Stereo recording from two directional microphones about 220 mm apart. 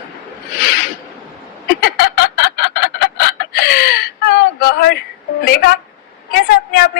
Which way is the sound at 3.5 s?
45° left (ahead or behind).